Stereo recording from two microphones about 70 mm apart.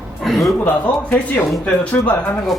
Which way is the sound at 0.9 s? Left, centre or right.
Left.